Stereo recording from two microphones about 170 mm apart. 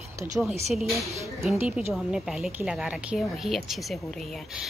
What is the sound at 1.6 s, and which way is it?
A woman's voice, 10° right (ahead or behind).